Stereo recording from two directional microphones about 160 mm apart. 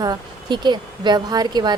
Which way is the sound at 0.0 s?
25° right (ahead or behind).